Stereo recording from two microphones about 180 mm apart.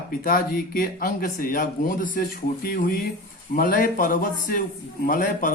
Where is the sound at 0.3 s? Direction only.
50° left (ahead or behind).